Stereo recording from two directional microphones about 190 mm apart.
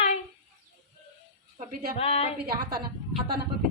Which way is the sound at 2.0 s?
30° left (ahead or behind).